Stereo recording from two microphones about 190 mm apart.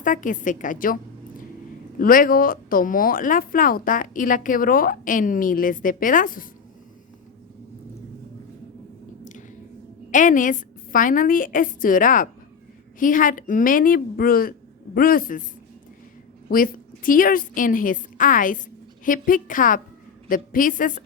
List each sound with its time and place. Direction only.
0.0 s a woman's voice: 45° left (ahead or behind)
2.0 s a woman's voice: 45° left (ahead or behind)
10.1 s a woman's voice: 40° left (ahead or behind)
16.5 s a woman's voice: 45° left (ahead or behind)